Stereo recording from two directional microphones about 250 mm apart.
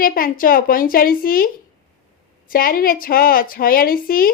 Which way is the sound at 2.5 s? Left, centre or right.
Left.